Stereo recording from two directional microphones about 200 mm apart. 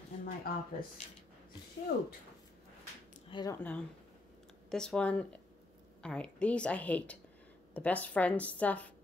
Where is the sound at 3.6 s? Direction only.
10° left (ahead or behind).